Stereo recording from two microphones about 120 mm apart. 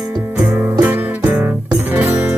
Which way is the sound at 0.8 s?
15° right (ahead or behind).